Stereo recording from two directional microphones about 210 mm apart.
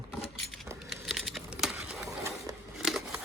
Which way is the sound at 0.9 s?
Centre (ahead or behind).